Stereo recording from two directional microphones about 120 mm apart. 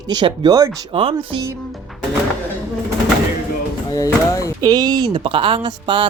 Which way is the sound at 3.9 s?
30° left (ahead or behind).